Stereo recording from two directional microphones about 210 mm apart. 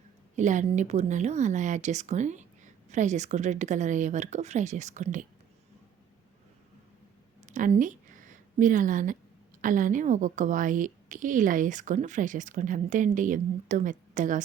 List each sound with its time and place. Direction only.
0.3 s a woman's voice: 35° right (ahead or behind)
7.4 s a sound: 35° right (ahead or behind)
9.6 s a woman's voice: 40° right (ahead or behind)